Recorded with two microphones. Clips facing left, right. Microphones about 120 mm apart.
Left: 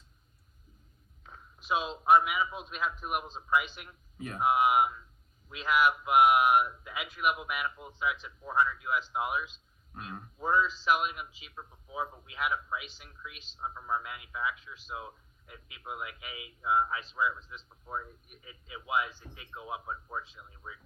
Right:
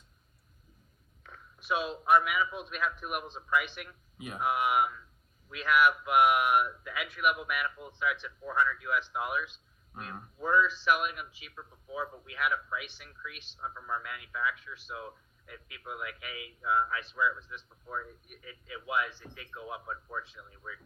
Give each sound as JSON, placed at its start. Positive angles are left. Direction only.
{"t": 1.2, "sound": "a man's voice", "side_deg": 20}
{"t": 10.4, "sound": "a man's voice", "side_deg": 25}